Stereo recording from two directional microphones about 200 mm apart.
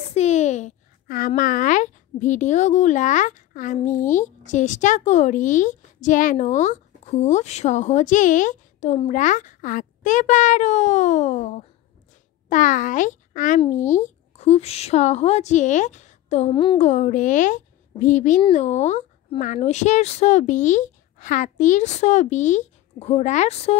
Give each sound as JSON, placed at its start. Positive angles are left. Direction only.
{"t": 0.1, "sound": "a child's voice", "side_deg": 35}